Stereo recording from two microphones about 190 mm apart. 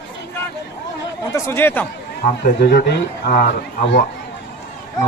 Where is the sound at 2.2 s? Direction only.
55° left (ahead or behind).